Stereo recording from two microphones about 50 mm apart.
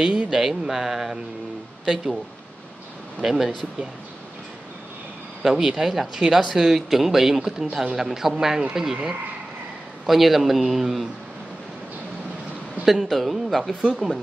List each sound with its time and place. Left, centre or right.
0.0 s speech: centre
3.2 s speech: centre
5.4 s speech: centre
10.0 s a man's voice: centre
12.8 s a man's voice: centre